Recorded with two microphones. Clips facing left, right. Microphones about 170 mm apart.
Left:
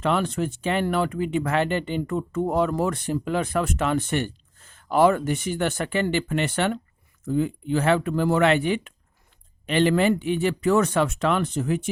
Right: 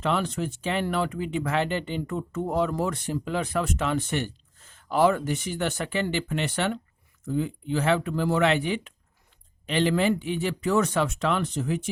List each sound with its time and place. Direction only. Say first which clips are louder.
0.0 s speech: left 3 dB; 55° left (ahead or behind)